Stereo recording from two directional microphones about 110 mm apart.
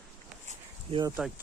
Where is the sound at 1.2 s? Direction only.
15° right (ahead or behind).